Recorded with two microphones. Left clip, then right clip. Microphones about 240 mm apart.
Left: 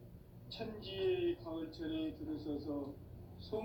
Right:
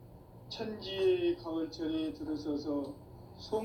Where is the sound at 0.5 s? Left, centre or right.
Right.